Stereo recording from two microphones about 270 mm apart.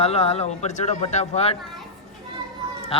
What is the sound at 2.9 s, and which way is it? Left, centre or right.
Speech, centre.